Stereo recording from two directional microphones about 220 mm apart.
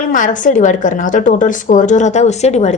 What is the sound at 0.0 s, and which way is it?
A woman's voice, 35° left (ahead or behind).